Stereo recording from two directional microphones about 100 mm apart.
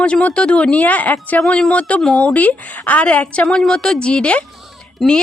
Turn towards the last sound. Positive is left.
turn(degrees=10)  # may be behind; listen again after turning